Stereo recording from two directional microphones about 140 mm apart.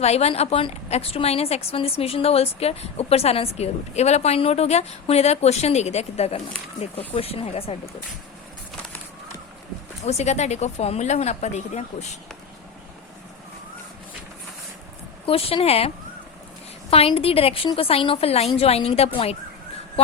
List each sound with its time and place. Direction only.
0.0 s a woman's voice: 50° left (ahead or behind)
10.0 s a woman's voice: 50° left (ahead or behind)
15.3 s a woman's voice: 45° left (ahead or behind)
16.9 s a woman's voice: 45° left (ahead or behind)